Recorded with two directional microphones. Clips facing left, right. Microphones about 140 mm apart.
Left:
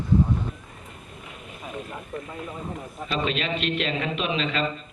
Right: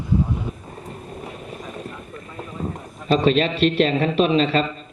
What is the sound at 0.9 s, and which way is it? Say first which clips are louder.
Vehicle: right 10 dB; 40° right (ahead or behind).